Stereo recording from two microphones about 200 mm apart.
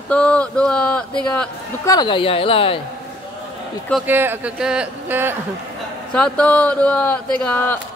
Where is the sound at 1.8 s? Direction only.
20° left (ahead or behind).